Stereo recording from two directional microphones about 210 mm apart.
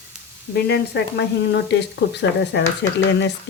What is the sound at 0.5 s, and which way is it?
Speech, 50° left (ahead or behind).